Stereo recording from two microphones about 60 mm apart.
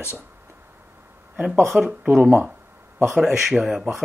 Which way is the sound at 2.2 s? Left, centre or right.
Right.